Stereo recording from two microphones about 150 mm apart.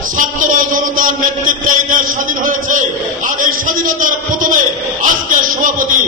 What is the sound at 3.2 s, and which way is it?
A man's voice, 65° right (ahead or behind).